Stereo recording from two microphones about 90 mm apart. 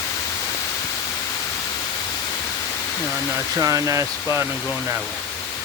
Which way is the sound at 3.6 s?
35° right (ahead or behind).